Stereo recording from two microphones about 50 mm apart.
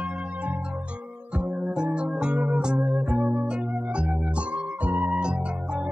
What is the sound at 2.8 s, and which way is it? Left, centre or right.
Music, right.